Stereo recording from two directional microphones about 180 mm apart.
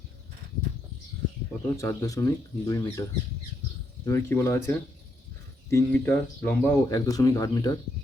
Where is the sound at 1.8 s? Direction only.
20° left (ahead or behind).